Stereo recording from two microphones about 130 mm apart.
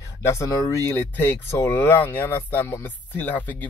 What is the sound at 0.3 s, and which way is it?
Speech, 25° left (ahead or behind).